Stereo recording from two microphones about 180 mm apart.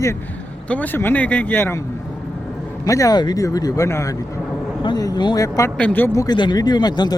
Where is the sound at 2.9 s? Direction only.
20° left (ahead or behind).